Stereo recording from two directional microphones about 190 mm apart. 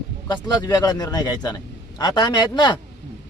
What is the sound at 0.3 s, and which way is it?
Speech, 20° left (ahead or behind).